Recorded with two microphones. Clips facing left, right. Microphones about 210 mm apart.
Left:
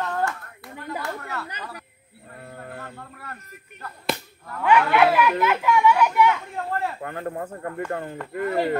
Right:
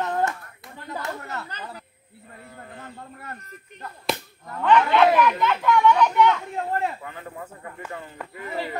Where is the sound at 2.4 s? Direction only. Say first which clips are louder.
Left 5 dB; 60° left (ahead or behind).